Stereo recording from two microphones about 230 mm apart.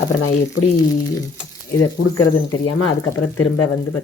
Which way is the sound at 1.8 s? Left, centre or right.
Left.